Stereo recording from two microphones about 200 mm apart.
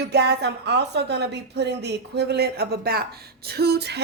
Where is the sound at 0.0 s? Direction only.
55° right (ahead or behind).